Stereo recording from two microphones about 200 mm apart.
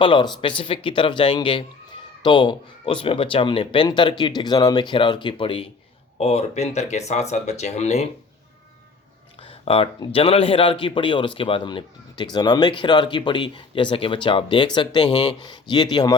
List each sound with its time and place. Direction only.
0.0 s speech: 25° left (ahead or behind)
9.4 s speech: 30° left (ahead or behind)